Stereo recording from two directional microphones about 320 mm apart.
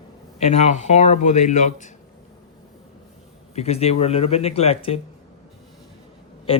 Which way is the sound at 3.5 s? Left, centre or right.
Centre.